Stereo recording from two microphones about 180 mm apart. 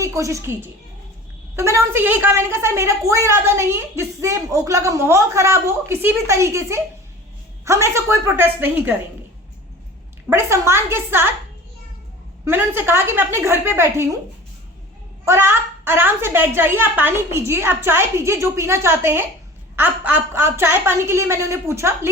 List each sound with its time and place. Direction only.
0.0 s a woman's voice: 15° right (ahead or behind)
10.2 s a woman's voice: 15° right (ahead or behind)
12.5 s a woman's voice: 10° right (ahead or behind)
15.2 s a woman's voice: 15° right (ahead or behind)